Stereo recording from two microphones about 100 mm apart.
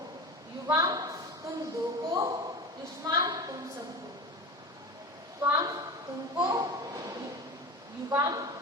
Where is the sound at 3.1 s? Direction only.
40° right (ahead or behind).